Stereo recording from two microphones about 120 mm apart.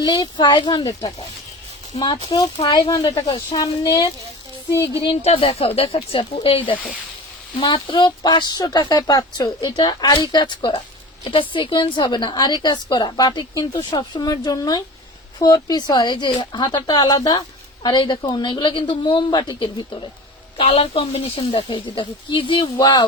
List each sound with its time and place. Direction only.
0.0 s speech: 35° left (ahead or behind)
5.2 s speech: 55° left (ahead or behind)
20.6 s speech: 55° left (ahead or behind); by 23.0 s 40° left (ahead or behind)